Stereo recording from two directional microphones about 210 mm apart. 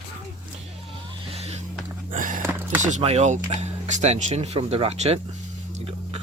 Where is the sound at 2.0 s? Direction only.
40° right (ahead or behind).